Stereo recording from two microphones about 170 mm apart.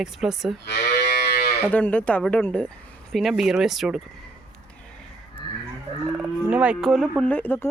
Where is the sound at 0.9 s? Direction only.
70° left (ahead or behind).